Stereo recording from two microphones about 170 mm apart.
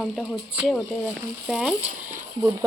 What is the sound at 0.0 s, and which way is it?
Speech, centre (ahead or behind).